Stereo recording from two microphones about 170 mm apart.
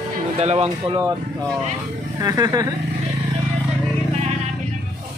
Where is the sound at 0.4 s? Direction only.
40° right (ahead or behind).